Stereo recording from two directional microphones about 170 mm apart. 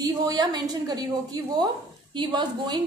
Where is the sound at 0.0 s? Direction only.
20° right (ahead or behind).